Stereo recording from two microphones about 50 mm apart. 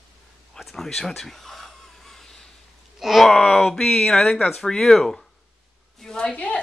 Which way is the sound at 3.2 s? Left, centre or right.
Centre.